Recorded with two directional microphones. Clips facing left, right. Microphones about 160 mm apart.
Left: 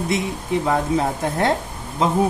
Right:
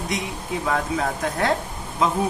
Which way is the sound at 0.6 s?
25° left (ahead or behind).